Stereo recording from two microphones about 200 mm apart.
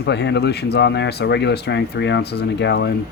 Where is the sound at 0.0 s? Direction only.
60° left (ahead or behind).